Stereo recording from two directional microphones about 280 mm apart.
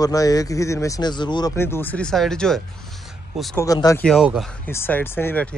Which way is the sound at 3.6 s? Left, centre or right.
Centre.